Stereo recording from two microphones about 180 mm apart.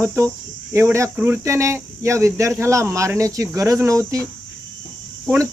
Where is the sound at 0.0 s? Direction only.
15° right (ahead or behind).